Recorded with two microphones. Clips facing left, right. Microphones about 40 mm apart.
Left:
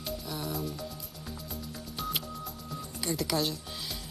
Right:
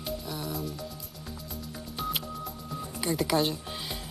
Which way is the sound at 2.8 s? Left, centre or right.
Centre.